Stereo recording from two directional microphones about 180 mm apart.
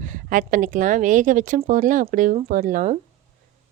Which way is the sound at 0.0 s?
45° right (ahead or behind).